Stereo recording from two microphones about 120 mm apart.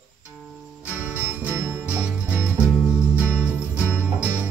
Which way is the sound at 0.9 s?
15° right (ahead or behind).